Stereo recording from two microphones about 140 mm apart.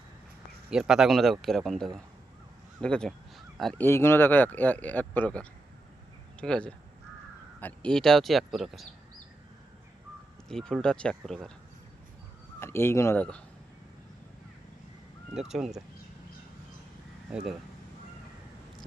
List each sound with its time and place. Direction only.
0.7 s speech: 5° right (ahead or behind)
3.8 s a man's voice: 15° left (ahead or behind); by 8.9 s centre (ahead or behind)
10.5 s speech: 5° left (ahead or behind)
12.5 s speech: 15° left (ahead or behind)
15.4 s speech: 5° right (ahead or behind)
17.3 s speech: 5° right (ahead or behind)